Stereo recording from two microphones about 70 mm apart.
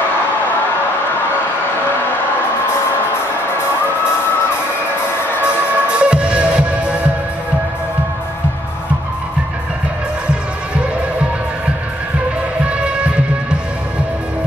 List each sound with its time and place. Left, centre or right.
5.4 s music: centre
12.6 s music: centre